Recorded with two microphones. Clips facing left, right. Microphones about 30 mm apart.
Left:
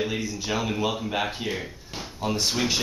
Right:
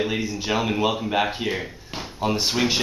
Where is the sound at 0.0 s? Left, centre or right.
Centre.